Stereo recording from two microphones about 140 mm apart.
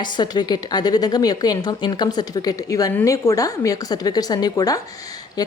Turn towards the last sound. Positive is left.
turn(degrees=25)  # may be behind; listen again after turning